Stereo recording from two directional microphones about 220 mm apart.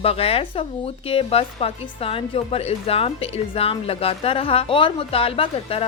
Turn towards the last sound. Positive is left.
turn(degrees=25)  # may be behind; listen again after turning